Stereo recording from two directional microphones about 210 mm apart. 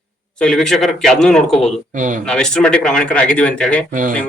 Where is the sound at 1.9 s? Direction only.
35° right (ahead or behind).